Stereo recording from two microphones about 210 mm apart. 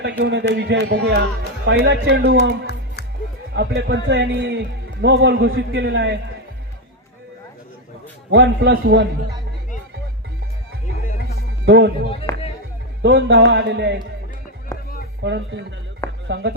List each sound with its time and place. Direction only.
0.0 s speech: 55° right (ahead or behind)
3.5 s speech: 55° right (ahead or behind)
8.3 s speech: 50° right (ahead or behind)
11.6 s speech: 50° right (ahead or behind)
14.7 s a sound: 15° left (ahead or behind)
15.2 s speech: 55° right (ahead or behind)